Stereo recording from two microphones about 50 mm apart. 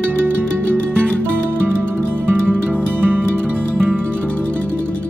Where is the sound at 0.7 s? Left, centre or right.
Left.